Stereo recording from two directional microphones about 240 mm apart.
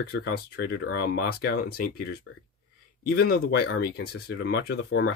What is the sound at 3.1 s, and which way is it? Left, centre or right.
Speech, left.